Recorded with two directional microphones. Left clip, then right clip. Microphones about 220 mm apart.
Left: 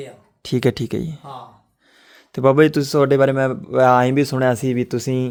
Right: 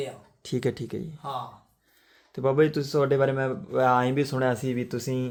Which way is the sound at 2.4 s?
55° left (ahead or behind).